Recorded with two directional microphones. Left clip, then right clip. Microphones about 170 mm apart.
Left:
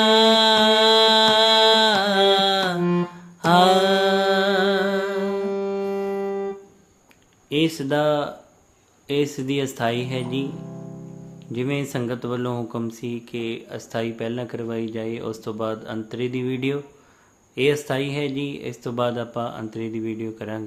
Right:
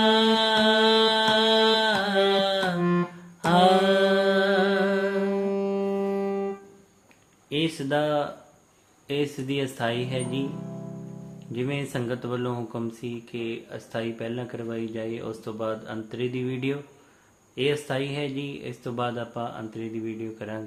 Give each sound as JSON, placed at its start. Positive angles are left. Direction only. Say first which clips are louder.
{"t": 0.0, "sound": "music", "louder": "left 5 dB", "side_deg": 45}
{"t": 3.4, "sound": "mantra", "louder": "left 3 dB", "side_deg": 45}
{"t": 5.9, "sound": "music", "louder": "left 2 dB", "side_deg": 15}
{"t": 7.5, "sound": "speech", "louder": "left 4 dB", "side_deg": 40}
{"t": 11.5, "sound": "speech", "louder": "left 4 dB", "side_deg": 35}